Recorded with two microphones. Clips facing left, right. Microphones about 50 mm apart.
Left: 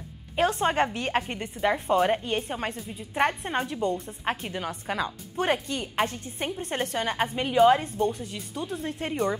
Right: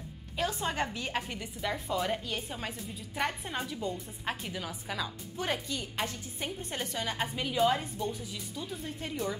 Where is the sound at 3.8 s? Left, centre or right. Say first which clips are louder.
Left 8 dB; left.